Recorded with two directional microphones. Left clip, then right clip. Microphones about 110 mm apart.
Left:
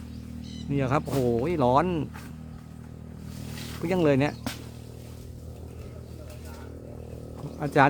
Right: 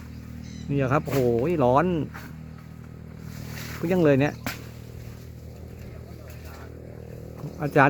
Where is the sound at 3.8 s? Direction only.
20° right (ahead or behind).